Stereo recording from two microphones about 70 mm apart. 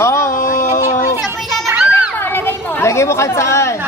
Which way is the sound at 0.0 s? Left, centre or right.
Left.